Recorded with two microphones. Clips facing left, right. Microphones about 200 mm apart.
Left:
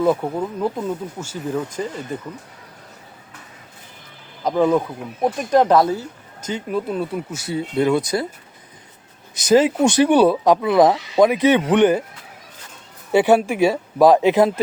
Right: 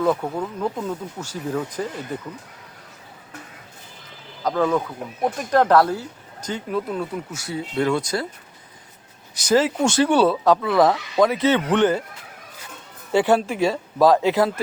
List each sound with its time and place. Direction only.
0.0 s speech: 15° left (ahead or behind)
4.4 s speech: 15° left (ahead or behind)
9.3 s speech: 20° left (ahead or behind)
13.1 s speech: 15° left (ahead or behind)